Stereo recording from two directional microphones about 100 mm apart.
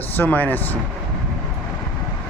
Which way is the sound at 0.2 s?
15° left (ahead or behind).